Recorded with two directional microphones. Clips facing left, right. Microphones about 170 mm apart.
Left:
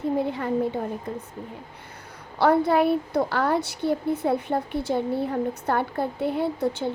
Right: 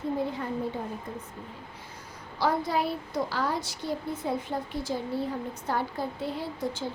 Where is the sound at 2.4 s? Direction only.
60° left (ahead or behind).